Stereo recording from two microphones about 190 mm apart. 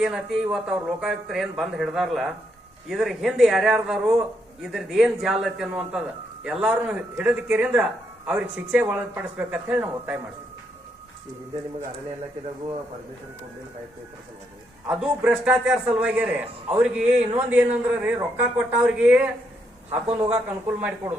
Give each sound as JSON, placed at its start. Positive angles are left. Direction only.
{"t": 0.0, "sound": "a man's voice", "side_deg": -5}
{"t": 14.8, "sound": "a man's voice", "side_deg": -5}
{"t": 20.1, "sound": "speech", "side_deg": -25}
{"t": 20.7, "sound": "a man's voice", "side_deg": -10}